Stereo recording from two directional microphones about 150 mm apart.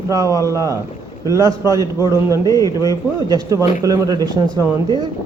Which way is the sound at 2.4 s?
25° left (ahead or behind).